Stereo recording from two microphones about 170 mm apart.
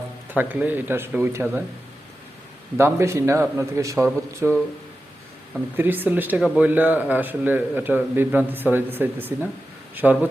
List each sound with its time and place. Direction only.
0.3 s a man's voice: 10° right (ahead or behind)
2.7 s a man's voice: 15° right (ahead or behind)
5.5 s a man's voice: 10° right (ahead or behind)